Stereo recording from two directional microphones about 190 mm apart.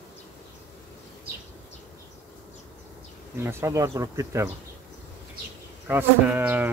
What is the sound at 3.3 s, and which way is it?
Speech, 15° right (ahead or behind).